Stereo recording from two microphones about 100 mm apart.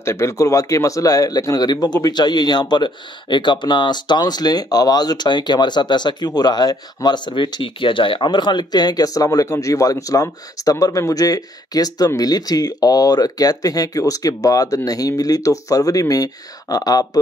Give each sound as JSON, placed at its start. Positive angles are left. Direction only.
{"t": 0.0, "sound": "speech", "side_deg": 30}